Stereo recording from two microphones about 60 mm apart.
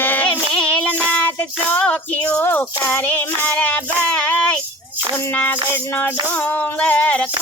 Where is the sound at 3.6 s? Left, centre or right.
Left.